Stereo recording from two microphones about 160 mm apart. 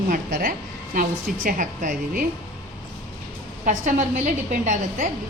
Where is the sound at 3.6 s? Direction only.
50° right (ahead or behind).